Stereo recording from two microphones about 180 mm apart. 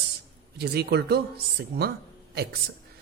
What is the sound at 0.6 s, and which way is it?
Speech, 65° right (ahead or behind).